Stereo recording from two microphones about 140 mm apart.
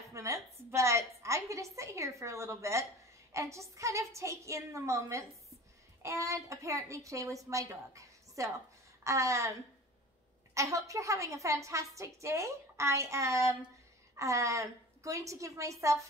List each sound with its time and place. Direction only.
0.1 s a woman's voice: 20° right (ahead or behind)
10.5 s a woman's voice: 20° right (ahead or behind)